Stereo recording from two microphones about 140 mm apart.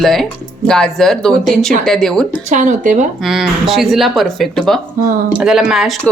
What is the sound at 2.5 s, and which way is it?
Speech, 60° right (ahead or behind).